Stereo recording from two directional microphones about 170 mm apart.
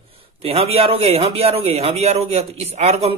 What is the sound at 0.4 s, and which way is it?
A man's voice, 35° right (ahead or behind).